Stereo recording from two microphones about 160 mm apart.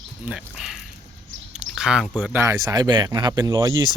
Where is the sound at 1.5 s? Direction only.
5° right (ahead or behind); by 3.9 s 20° right (ahead or behind).